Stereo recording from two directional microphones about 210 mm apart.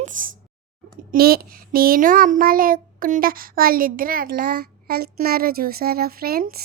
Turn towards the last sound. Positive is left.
turn(degrees=-45)  # may be behind; listen again after turning